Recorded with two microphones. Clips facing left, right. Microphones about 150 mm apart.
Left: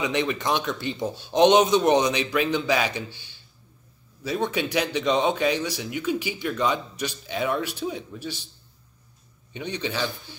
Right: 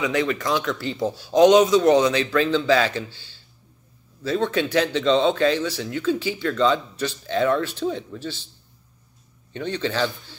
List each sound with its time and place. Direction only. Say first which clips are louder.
0.0 s speech: right 2 dB; 20° left (ahead or behind)
9.5 s speech: right 4 dB; 15° left (ahead or behind)